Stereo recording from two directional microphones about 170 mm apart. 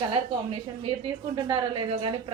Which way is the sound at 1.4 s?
25° right (ahead or behind).